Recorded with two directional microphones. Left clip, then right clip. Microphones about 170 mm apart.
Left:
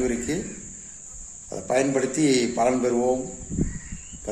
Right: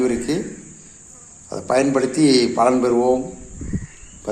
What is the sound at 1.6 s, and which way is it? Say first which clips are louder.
A man's voice: right 5 dB; 20° left (ahead or behind).